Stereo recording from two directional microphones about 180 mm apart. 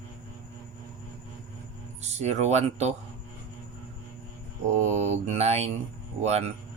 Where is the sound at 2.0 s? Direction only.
40° right (ahead or behind).